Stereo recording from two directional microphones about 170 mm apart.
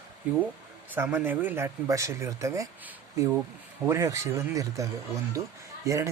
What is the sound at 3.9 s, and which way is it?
Speech, 15° right (ahead or behind).